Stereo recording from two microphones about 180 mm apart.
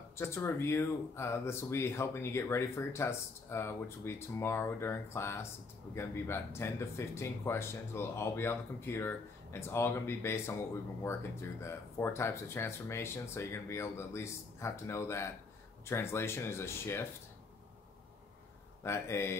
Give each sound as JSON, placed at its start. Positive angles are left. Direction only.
{"t": 0.2, "sound": "speech", "side_deg": 15}
{"t": 18.9, "sound": "speech", "side_deg": 15}